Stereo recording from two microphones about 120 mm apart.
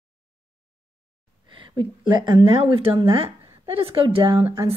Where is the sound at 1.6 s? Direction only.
45° right (ahead or behind).